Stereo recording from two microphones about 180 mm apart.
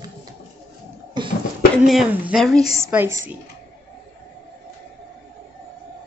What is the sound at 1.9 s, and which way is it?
Speech, centre (ahead or behind).